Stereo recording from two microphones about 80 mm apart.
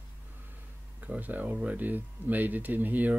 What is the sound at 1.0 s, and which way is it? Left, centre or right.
Speech, centre.